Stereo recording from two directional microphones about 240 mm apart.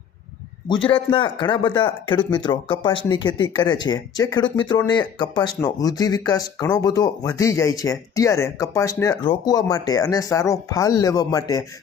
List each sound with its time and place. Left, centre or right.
0.9 s speech: left